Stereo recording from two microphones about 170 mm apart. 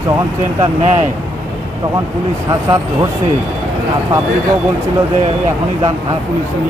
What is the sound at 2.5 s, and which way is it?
Speech, 20° right (ahead or behind).